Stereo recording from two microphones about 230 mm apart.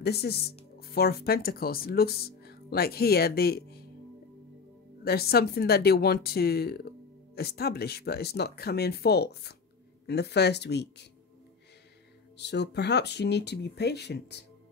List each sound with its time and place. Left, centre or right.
0.0 s speech: left
5.0 s speech: left
12.4 s speech: left